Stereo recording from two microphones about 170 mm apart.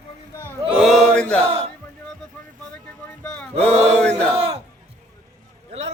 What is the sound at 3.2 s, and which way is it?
Male singing, 5° left (ahead or behind).